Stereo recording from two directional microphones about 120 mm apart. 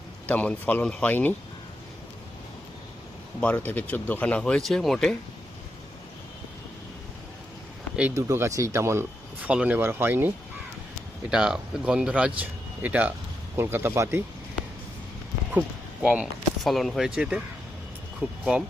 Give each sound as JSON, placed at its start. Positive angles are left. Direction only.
{"t": 0.3, "sound": "speech", "side_deg": 15}
{"t": 3.4, "sound": "speech", "side_deg": 15}
{"t": 8.1, "sound": "speech", "side_deg": -25}
{"t": 9.5, "sound": "speech", "side_deg": -10}
{"t": 11.3, "sound": "speech", "side_deg": -5}
{"t": 16.0, "sound": "speech", "side_deg": -5}